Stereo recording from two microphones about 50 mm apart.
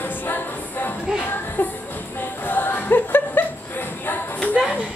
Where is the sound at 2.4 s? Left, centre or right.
Left.